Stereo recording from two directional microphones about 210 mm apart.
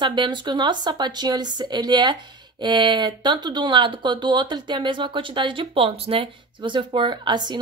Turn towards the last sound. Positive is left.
turn(degrees=-20)  # may be behind; listen again after turning